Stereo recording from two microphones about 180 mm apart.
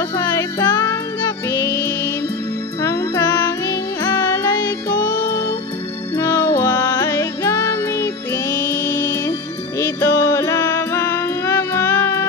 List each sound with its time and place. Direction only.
0.1 s music: 20° left (ahead or behind)